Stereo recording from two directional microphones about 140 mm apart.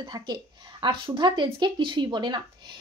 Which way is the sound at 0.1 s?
30° right (ahead or behind).